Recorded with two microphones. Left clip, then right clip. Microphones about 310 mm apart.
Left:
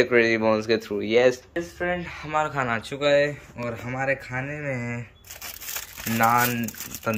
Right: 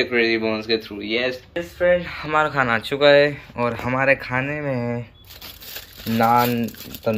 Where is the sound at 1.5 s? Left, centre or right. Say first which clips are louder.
Right 9 dB; centre.